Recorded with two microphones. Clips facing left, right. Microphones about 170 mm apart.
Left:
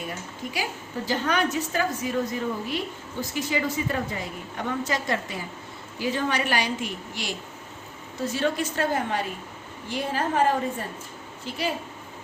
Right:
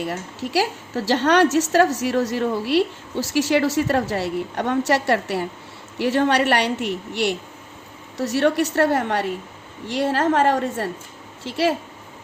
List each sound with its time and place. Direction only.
0.0 s a woman's voice: 80° right